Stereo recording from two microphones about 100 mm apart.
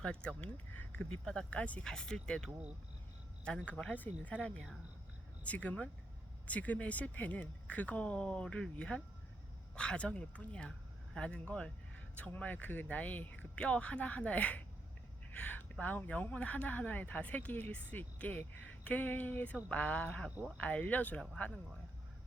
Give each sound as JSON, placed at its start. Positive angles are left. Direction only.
{"t": 0.0, "sound": "speech", "side_deg": 10}
{"t": 3.7, "sound": "speech", "side_deg": 15}